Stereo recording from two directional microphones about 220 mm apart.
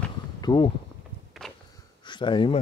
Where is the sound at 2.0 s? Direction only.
20° left (ahead or behind).